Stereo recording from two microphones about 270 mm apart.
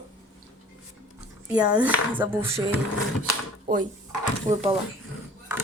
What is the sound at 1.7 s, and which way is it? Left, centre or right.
Speech, centre.